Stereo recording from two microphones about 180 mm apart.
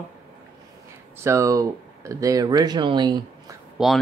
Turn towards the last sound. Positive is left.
turn(degrees=-5)  # may be behind; listen again after turning